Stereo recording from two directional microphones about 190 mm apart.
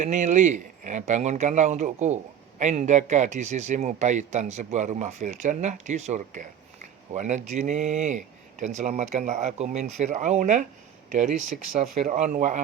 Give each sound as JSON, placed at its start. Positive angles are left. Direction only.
{"t": 0.0, "sound": "speech", "side_deg": -40}